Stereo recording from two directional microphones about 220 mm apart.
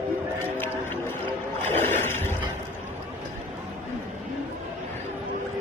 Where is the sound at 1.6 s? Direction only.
10° left (ahead or behind).